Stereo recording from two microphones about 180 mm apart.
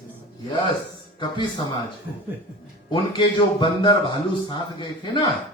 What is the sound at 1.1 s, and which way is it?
Speech, 25° left (ahead or behind).